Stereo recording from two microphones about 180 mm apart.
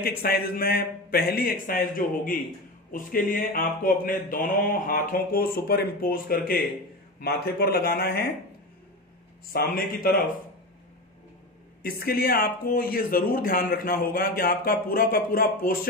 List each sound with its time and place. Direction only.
0.0 s speech: 55° left (ahead or behind)
2.9 s a sound: 50° left (ahead or behind)
7.2 s speech: 60° left (ahead or behind)
9.5 s speech: 55° left (ahead or behind)
11.8 s speech: 55° left (ahead or behind)